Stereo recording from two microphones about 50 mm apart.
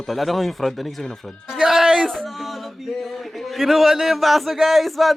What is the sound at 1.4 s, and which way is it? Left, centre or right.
Speech, centre.